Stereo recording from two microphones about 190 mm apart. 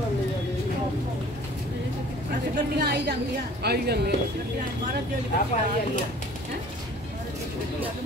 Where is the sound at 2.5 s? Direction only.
55° right (ahead or behind).